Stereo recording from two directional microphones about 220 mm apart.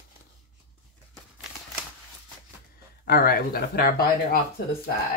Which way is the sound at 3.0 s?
45° left (ahead or behind).